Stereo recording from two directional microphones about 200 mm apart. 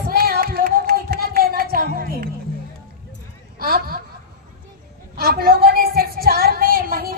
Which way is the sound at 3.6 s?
50° right (ahead or behind).